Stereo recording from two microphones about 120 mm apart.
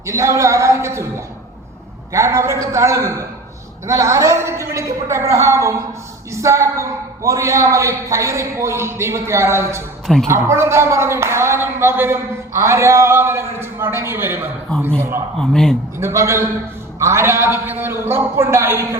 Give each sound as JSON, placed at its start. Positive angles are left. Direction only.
{"t": 0.0, "sound": "a sound", "side_deg": -25}
{"t": 2.1, "sound": "speech", "side_deg": -20}
{"t": 16.0, "sound": "speech", "side_deg": -20}